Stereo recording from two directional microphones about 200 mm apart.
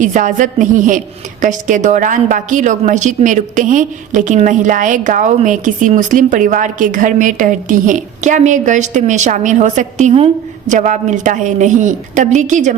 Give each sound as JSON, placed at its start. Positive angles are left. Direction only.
{"t": 0.0, "sound": "a woman's voice", "side_deg": -40}